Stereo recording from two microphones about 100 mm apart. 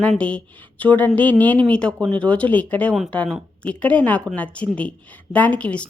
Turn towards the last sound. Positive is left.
turn(degrees=10)  # may be behind; listen again after turning